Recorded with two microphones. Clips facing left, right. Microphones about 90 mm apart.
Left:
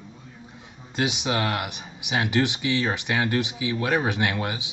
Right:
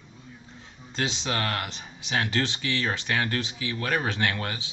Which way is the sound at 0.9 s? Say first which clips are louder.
Left 4 dB; 15° left (ahead or behind).